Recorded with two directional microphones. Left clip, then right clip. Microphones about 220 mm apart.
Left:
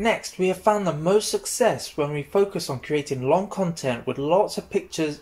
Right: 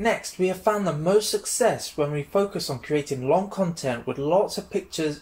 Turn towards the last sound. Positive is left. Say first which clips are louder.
# left 2 dB
turn(degrees=25)  # may be behind; listen again after turning